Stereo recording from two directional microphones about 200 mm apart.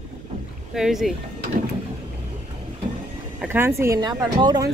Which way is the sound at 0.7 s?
Centre (ahead or behind).